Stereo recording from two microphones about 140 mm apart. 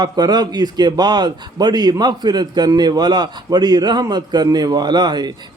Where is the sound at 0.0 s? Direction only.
30° right (ahead or behind).